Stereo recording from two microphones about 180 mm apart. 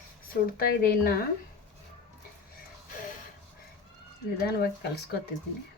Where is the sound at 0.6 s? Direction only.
55° left (ahead or behind).